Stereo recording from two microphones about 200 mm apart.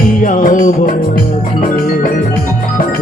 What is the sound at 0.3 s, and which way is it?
Music, 45° left (ahead or behind).